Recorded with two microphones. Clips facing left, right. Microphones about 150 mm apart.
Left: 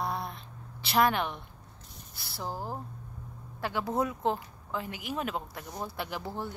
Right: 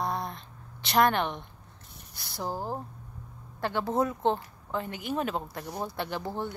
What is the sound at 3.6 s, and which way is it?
A woman's voice, 5° left (ahead or behind).